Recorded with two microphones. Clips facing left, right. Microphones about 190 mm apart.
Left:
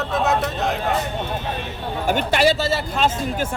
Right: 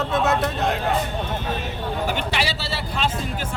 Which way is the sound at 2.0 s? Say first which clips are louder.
Left 10 dB; 50° left (ahead or behind).